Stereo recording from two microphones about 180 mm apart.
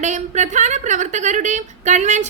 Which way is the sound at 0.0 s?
40° right (ahead or behind).